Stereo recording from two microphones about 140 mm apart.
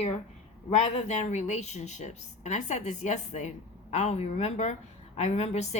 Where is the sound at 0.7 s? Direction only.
50° left (ahead or behind).